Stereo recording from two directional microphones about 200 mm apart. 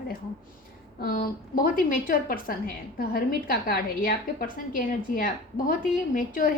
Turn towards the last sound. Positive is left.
turn(degrees=45)  # may be behind; listen again after turning